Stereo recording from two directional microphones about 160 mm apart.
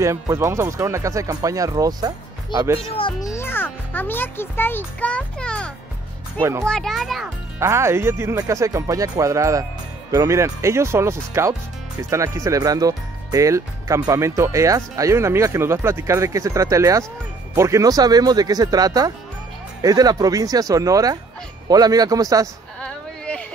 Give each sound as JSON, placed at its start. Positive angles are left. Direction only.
{"t": 0.0, "sound": "speech", "side_deg": -20}
{"t": 2.8, "sound": "speech", "side_deg": 35}
{"t": 3.3, "sound": "a child's voice", "side_deg": 15}
{"t": 6.4, "sound": "speech", "side_deg": -15}
{"t": 6.7, "sound": "a child's voice", "side_deg": 0}
{"t": 7.5, "sound": "speech", "side_deg": -15}
{"t": 22.8, "sound": "a sound", "side_deg": 5}